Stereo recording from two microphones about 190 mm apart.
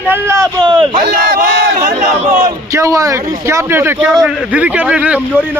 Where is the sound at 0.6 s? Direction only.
25° right (ahead or behind).